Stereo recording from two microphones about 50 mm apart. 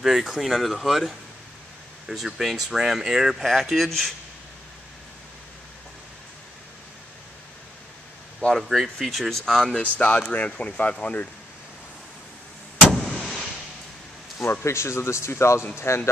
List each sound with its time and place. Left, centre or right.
0.0 s speech: centre
3.4 s speech: centre
8.4 s speech: centre
8.6 s speech: centre
9.9 s speech: left
12.9 s vehicle: centre
14.4 s speech: left